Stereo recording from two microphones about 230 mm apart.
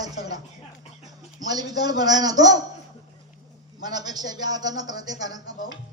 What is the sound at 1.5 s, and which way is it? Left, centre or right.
Speech, centre.